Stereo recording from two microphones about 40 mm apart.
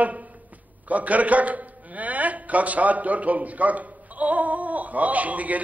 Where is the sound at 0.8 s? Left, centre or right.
Right.